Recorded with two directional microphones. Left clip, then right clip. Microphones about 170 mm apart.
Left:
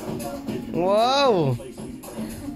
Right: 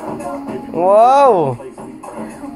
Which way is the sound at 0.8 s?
20° left (ahead or behind).